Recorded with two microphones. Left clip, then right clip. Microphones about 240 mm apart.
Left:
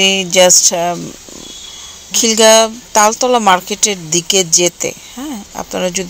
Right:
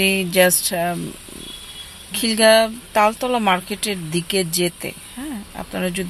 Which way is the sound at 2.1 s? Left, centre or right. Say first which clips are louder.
Left 6 dB; centre.